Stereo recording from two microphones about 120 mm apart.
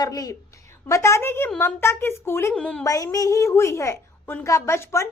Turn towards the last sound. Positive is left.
turn(degrees=25)  # may be behind; listen again after turning